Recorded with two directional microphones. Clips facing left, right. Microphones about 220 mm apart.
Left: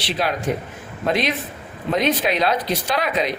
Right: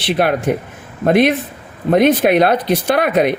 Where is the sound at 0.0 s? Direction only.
55° right (ahead or behind).